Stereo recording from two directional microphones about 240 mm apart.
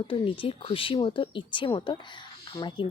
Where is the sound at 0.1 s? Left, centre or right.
Left.